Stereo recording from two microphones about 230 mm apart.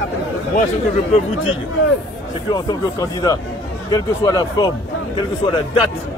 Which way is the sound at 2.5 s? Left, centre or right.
Centre.